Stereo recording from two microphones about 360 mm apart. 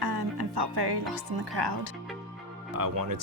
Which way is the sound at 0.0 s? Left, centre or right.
Right.